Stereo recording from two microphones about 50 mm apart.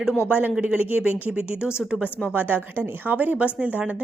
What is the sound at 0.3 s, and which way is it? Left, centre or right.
A woman's voice, right.